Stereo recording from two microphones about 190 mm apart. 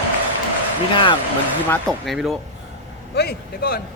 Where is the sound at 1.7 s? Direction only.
Centre (ahead or behind).